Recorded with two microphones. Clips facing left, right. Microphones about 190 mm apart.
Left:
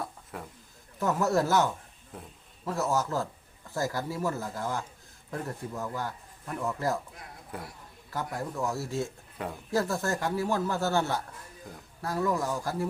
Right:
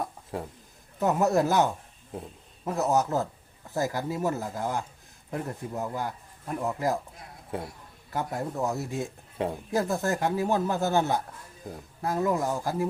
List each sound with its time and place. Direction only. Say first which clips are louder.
0.3 s a man's voice: right 7 dB; 30° right (ahead or behind)